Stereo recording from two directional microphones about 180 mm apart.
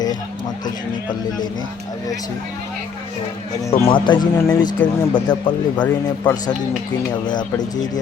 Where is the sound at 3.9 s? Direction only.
25° left (ahead or behind).